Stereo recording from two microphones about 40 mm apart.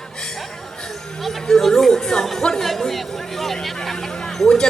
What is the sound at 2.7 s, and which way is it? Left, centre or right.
Music, centre.